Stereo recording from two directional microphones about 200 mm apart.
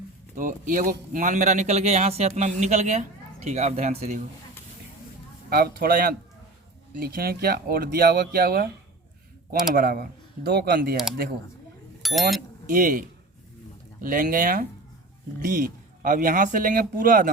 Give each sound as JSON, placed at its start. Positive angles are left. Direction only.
{"t": 0.3, "sound": "a man's voice", "side_deg": -40}
{"t": 5.5, "sound": "speech", "side_deg": -50}
{"t": 9.7, "sound": "speech", "side_deg": -45}
{"t": 12.0, "sound": "speech", "side_deg": 0}
{"t": 12.6, "sound": "speech", "side_deg": -45}